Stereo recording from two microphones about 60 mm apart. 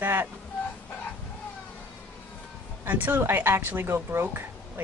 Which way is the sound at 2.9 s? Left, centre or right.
Right.